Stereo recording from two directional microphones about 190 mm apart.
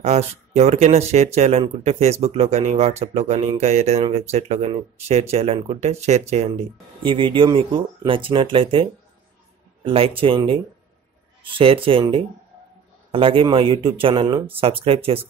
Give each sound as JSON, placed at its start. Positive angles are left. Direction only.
{"t": 0.0, "sound": "speech", "side_deg": -35}
{"t": 9.8, "sound": "speech", "side_deg": -30}